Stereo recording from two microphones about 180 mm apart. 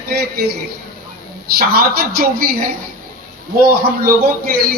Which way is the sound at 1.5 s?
60° right (ahead or behind).